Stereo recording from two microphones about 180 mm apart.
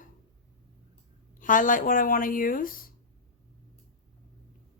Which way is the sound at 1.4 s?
50° left (ahead or behind).